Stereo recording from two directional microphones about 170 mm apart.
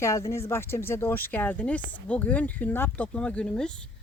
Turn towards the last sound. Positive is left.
turn(degrees=5)  # may be behind; listen again after turning